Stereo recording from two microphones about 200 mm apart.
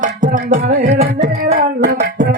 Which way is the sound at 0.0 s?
40° right (ahead or behind).